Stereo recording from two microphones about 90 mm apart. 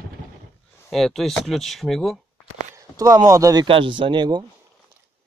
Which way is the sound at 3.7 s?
70° right (ahead or behind).